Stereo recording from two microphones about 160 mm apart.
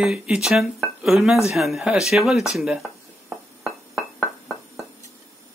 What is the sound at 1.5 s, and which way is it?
Speech, centre (ahead or behind).